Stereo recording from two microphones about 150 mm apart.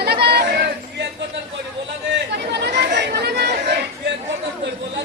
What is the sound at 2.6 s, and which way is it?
Chatter, 90° right.